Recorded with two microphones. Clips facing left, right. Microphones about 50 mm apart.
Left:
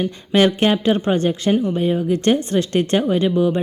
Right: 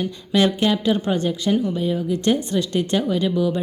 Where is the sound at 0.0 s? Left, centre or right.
Left.